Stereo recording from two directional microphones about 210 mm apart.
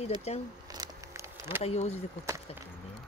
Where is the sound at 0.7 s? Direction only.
15° right (ahead or behind).